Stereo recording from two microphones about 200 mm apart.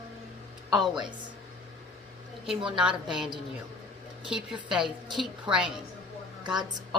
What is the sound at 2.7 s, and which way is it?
Speech, 5° right (ahead or behind).